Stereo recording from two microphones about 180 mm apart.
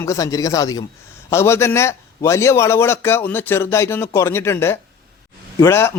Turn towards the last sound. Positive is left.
turn(degrees=15)  # may be behind; listen again after turning